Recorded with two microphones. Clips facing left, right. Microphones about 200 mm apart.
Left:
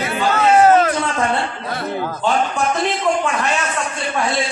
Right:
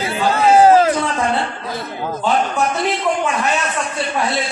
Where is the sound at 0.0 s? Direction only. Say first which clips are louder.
Right 1 dB; 30° right (ahead or behind).